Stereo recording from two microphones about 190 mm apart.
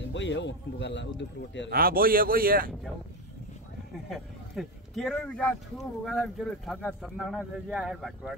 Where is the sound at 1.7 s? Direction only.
50° right (ahead or behind).